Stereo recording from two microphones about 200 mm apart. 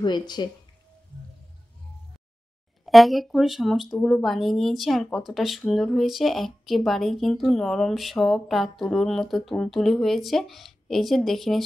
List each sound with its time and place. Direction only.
0.4 s speech: 20° left (ahead or behind)
2.8 s speech: centre (ahead or behind)